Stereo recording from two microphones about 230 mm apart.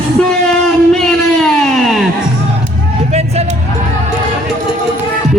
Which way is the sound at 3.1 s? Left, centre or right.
Right.